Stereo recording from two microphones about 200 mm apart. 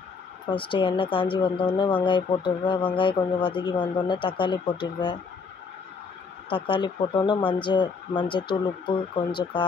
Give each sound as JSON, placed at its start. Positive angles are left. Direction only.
{"t": 0.5, "sound": "speech", "side_deg": 25}
{"t": 6.5, "sound": "speech", "side_deg": 25}